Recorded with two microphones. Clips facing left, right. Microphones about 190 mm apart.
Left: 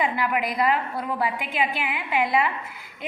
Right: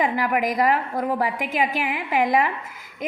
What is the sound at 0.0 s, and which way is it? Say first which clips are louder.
A woman's voice: right 3 dB; 45° right (ahead or behind).